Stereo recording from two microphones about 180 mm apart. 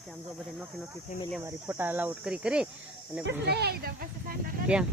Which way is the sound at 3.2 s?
65° right (ahead or behind).